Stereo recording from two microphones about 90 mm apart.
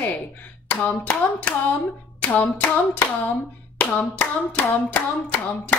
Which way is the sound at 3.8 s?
15° left (ahead or behind).